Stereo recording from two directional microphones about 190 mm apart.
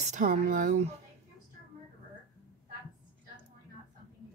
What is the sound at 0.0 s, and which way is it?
Speech, 45° right (ahead or behind).